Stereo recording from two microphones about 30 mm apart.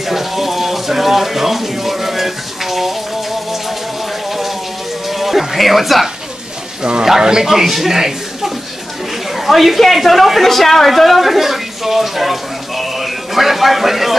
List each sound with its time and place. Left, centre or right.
0.1 s a sound: centre
5.2 s music: centre
6.8 s a man's voice: right
7.4 s a woman's voice: centre
7.9 s a sound: centre
9.5 s a woman's voice: centre